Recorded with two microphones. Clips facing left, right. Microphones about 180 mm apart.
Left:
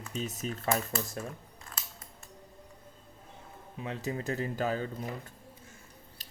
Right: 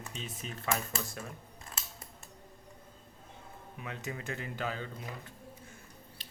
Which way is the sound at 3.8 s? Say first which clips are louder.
Left 6 dB; 30° left (ahead or behind).